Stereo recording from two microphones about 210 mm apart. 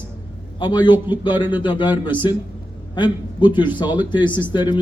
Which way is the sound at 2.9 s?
20° left (ahead or behind).